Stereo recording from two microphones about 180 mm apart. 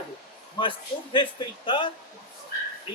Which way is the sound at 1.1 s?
25° left (ahead or behind).